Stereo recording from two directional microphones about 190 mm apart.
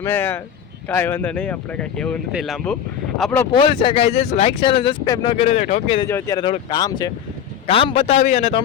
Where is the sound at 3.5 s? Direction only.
25° left (ahead or behind).